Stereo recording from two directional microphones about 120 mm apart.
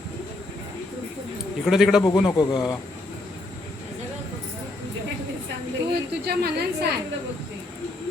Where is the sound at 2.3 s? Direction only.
35° left (ahead or behind).